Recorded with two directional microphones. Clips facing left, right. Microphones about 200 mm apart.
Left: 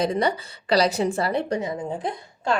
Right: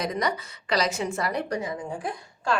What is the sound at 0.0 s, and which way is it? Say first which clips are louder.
A woman's voice: left 5 dB; 30° left (ahead or behind).